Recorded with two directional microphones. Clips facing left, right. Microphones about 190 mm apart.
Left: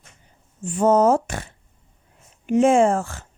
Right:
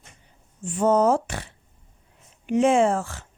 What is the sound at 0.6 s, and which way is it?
Speech, 45° left (ahead or behind).